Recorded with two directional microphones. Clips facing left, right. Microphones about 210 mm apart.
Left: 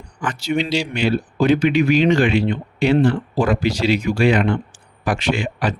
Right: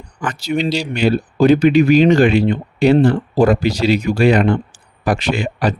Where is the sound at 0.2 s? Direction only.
40° right (ahead or behind).